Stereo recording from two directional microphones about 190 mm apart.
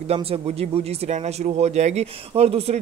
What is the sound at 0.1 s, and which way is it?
Speech, 30° right (ahead or behind).